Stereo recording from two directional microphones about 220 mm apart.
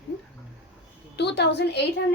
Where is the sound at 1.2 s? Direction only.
50° left (ahead or behind).